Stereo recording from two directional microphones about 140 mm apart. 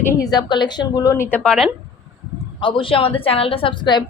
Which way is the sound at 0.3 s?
30° left (ahead or behind).